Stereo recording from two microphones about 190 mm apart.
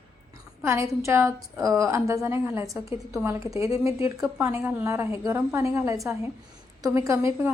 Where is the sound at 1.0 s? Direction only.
15° right (ahead or behind).